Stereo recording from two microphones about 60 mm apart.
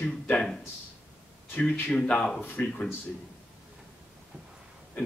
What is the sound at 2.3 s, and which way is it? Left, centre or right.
Speech, left.